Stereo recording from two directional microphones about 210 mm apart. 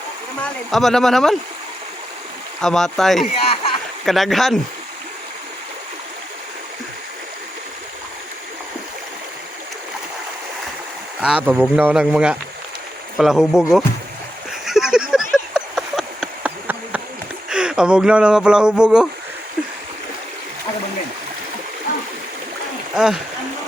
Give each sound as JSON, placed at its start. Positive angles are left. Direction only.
{"t": 0.4, "sound": "speech", "side_deg": 0}
{"t": 2.6, "sound": "speech", "side_deg": 0}
{"t": 3.3, "sound": "a sound", "side_deg": 25}
{"t": 4.0, "sound": "speech", "side_deg": 0}
{"t": 11.2, "sound": "speech", "side_deg": -5}
{"t": 14.6, "sound": "a sound", "side_deg": 0}
{"t": 17.5, "sound": "speech", "side_deg": -5}
{"t": 23.0, "sound": "speech", "side_deg": 0}